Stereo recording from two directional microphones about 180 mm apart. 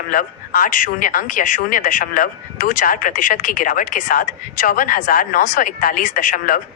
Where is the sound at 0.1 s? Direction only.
50° left (ahead or behind).